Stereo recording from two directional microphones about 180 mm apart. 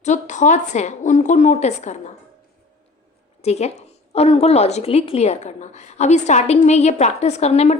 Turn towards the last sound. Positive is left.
turn(degrees=35)  # may be behind; listen again after turning